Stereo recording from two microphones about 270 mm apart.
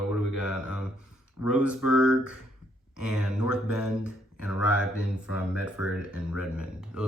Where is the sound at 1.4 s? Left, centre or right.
Centre.